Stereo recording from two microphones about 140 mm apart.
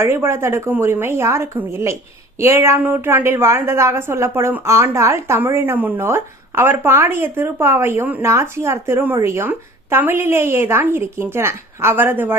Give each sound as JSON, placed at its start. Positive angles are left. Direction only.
{"t": 0.0, "sound": "a woman's voice", "side_deg": -15}